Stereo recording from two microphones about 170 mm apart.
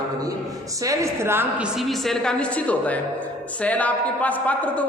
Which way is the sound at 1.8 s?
Centre (ahead or behind).